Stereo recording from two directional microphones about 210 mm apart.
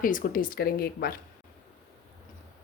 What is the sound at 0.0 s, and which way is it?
Speech, 40° left (ahead or behind).